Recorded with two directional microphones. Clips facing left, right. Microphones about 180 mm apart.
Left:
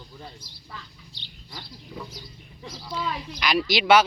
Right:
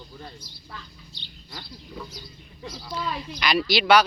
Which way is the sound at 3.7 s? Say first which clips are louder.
Even; 20° left (ahead or behind).